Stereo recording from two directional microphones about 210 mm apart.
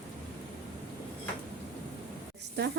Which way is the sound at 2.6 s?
55° right (ahead or behind).